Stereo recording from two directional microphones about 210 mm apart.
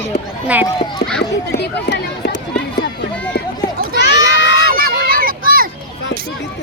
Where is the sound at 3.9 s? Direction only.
55° left (ahead or behind).